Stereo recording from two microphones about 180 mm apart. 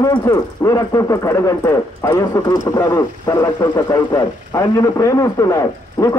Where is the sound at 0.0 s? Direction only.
20° left (ahead or behind).